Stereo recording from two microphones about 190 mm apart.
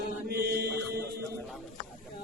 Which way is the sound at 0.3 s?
55° right (ahead or behind).